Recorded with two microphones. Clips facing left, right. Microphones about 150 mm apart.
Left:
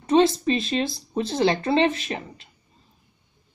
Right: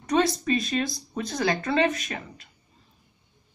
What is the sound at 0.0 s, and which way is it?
Speech, 25° left (ahead or behind).